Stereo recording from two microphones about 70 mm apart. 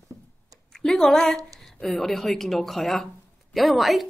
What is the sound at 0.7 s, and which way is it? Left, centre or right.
A woman's voice, centre.